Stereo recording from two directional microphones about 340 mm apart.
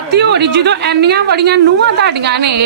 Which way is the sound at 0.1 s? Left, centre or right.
Right.